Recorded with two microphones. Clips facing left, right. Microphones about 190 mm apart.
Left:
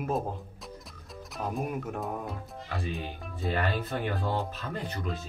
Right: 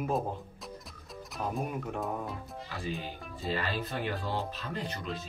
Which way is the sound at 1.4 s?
Centre (ahead or behind).